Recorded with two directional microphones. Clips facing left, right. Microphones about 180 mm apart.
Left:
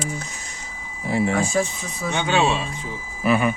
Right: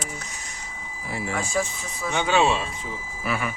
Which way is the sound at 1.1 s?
25° left (ahead or behind).